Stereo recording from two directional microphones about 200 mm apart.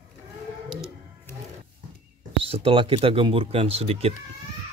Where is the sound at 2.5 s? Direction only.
30° right (ahead or behind).